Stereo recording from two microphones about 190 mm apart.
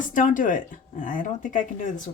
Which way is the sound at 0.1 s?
45° left (ahead or behind).